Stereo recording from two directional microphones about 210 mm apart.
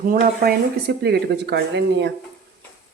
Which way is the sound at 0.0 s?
40° right (ahead or behind).